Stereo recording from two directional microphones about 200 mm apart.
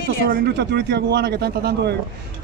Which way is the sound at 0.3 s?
55° right (ahead or behind).